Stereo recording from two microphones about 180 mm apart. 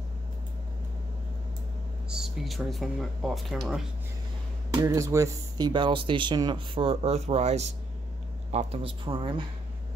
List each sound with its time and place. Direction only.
2.0 s speech: 5° right (ahead or behind)
4.7 s speech: 20° right (ahead or behind)